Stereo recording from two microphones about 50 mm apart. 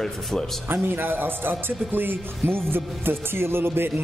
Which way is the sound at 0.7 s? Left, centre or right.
Right.